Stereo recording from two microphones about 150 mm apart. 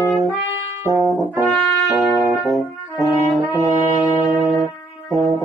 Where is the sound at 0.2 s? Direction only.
20° right (ahead or behind).